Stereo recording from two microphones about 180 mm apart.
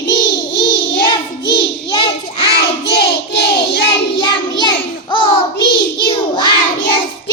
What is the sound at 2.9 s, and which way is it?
Child singing, 65° left (ahead or behind).